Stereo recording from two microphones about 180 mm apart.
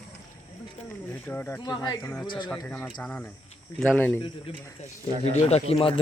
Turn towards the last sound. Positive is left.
turn(degrees=35)  # may be behind; listen again after turning